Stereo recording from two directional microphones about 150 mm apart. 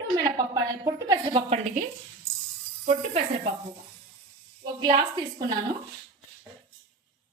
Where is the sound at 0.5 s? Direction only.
25° right (ahead or behind).